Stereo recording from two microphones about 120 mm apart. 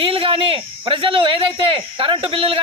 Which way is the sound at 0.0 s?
50° right (ahead or behind).